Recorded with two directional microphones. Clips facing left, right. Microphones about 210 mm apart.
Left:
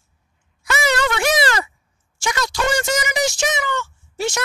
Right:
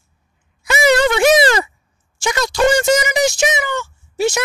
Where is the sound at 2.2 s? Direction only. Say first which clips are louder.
Right 6 dB; 25° right (ahead or behind).